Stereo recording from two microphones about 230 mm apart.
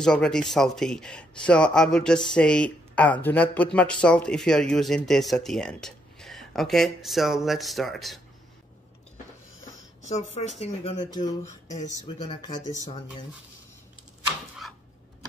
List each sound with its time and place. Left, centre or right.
0.0 s speech: centre
10.0 s speech: left
11.6 s speech: left
11.9 s speech: centre